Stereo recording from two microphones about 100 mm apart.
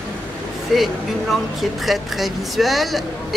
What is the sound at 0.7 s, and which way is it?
Speech, centre (ahead or behind).